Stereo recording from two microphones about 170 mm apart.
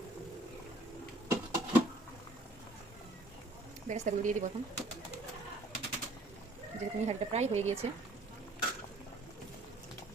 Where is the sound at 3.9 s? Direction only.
45° right (ahead or behind).